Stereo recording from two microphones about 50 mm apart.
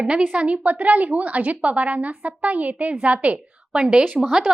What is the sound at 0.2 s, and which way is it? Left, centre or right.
A woman's voice, right.